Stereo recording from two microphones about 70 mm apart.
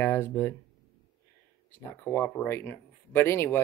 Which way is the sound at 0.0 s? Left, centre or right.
Left.